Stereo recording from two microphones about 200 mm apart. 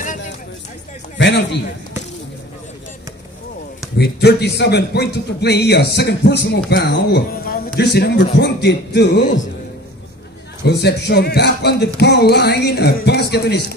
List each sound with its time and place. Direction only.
1.1 s a sound: 65° left (ahead or behind)
4.0 s speech: 55° left (ahead or behind)
10.6 s speech: 55° left (ahead or behind)